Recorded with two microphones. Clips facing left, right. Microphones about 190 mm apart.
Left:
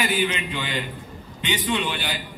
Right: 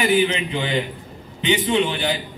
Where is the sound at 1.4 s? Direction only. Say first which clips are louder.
Right 6 dB; 20° right (ahead or behind).